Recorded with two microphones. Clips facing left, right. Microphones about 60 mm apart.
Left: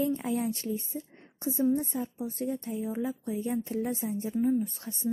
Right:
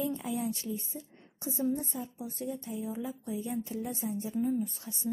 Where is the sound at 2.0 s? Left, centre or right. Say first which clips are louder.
Left 5 dB; left.